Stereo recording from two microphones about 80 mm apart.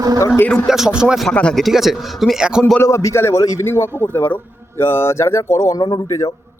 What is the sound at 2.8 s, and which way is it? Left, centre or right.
Speech, left.